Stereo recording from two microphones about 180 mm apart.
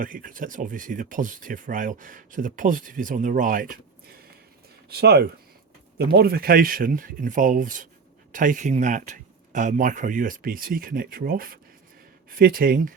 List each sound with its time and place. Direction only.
0.0 s speech: 50° right (ahead or behind)
4.9 s speech: 60° right (ahead or behind)